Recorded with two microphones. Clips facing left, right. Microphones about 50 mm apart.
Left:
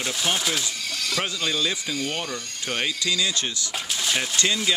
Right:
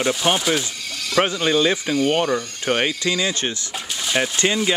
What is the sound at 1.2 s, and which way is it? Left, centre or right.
Speech, right.